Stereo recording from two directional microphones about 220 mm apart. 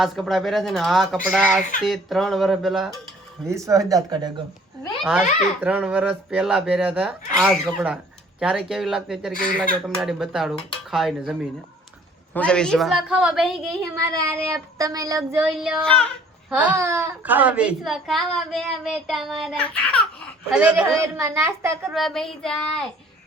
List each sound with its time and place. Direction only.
0.0 s a child's voice: centre (ahead or behind)
3.5 s a child's voice: 15° right (ahead or behind)
5.0 s a child's voice: 5° right (ahead or behind)
13.9 s a child's voice: 15° right (ahead or behind)
15.4 s a child's voice: centre (ahead or behind)
16.5 s a child's voice: 10° right (ahead or behind)
21.9 s a child's voice: centre (ahead or behind)